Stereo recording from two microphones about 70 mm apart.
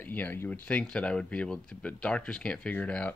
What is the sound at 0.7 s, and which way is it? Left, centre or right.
Speech, centre.